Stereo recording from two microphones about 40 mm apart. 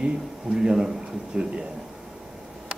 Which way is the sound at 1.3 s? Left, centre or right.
Right.